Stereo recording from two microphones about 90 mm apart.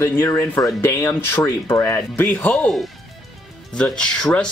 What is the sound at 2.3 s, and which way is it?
Speech, 15° left (ahead or behind).